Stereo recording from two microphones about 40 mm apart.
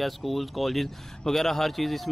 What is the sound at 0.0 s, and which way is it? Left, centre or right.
Speech, centre.